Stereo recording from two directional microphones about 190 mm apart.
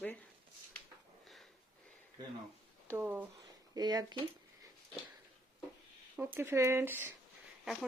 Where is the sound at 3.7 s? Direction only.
20° right (ahead or behind).